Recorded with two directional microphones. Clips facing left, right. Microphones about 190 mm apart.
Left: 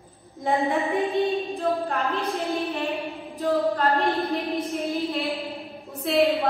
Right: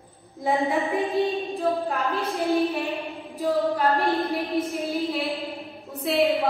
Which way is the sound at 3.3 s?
15° right (ahead or behind).